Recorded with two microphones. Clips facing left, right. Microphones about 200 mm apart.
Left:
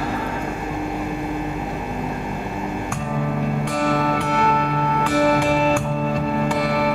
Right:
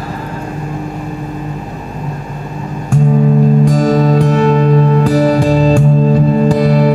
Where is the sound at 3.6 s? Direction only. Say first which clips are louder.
Right 10 dB; 35° right (ahead or behind).